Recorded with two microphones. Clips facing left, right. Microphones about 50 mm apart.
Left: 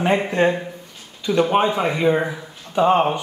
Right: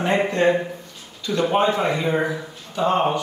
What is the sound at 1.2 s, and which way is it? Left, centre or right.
Speech, centre.